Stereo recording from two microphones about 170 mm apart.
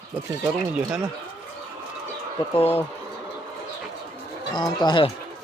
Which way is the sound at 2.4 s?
30° left (ahead or behind).